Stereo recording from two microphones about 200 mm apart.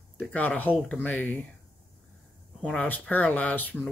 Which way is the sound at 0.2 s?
5° left (ahead or behind).